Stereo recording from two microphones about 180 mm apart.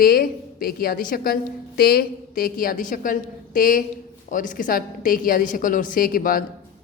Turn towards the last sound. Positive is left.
turn(degrees=50)  # may be behind; listen again after turning